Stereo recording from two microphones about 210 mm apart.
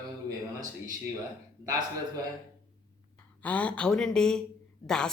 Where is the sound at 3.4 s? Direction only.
5° left (ahead or behind).